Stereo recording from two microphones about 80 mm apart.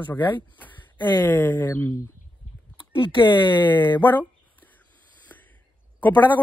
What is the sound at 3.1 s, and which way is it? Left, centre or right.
Speech, left.